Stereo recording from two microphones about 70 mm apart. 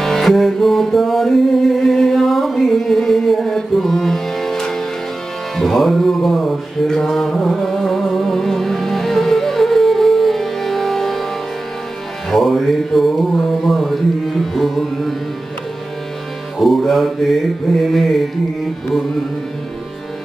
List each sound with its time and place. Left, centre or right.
0.0 s music: centre
12.3 s music: centre
16.5 s mantra: centre